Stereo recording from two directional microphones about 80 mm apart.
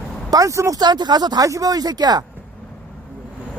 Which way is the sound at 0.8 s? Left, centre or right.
Right.